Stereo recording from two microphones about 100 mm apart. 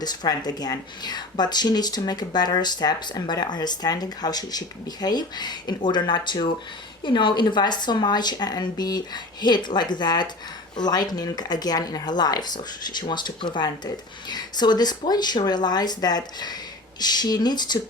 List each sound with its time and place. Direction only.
0.0 s a woman's voice: 45° left (ahead or behind)